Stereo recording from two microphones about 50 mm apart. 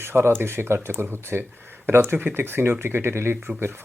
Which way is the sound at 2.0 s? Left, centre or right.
Right.